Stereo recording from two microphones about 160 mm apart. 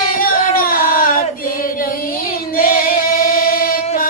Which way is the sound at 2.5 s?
60° left (ahead or behind).